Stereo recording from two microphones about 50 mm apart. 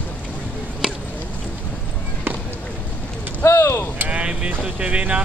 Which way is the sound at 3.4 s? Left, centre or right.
Left.